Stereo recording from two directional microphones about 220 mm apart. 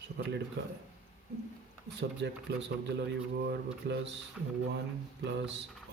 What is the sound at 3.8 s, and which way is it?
Speech, 50° right (ahead or behind).